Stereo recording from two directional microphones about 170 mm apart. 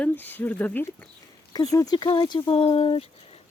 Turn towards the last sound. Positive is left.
turn(degrees=35)  # may be behind; listen again after turning